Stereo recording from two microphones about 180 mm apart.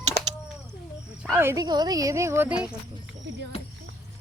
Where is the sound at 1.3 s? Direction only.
15° right (ahead or behind).